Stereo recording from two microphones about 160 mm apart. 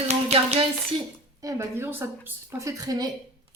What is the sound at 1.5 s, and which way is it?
A woman's voice, 15° right (ahead or behind).